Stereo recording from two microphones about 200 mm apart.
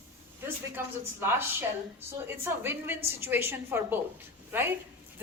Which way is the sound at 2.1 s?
10° right (ahead or behind).